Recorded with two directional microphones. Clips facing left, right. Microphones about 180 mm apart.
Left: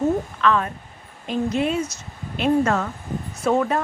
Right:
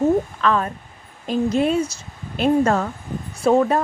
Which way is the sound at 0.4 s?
35° right (ahead or behind).